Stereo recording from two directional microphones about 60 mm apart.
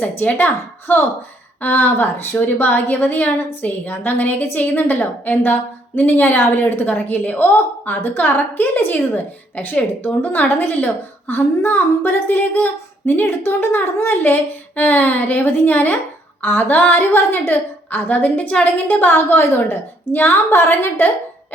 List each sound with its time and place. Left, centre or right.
0.0 s a woman's voice: left